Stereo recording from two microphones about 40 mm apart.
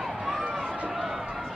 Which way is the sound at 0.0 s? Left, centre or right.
Centre.